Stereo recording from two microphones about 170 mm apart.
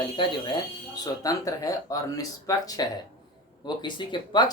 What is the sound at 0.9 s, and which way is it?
Speech, 20° left (ahead or behind).